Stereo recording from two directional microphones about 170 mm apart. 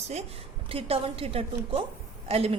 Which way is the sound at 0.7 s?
35° right (ahead or behind).